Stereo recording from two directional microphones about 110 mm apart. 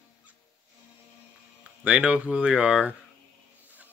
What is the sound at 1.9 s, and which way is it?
Speech, 10° right (ahead or behind).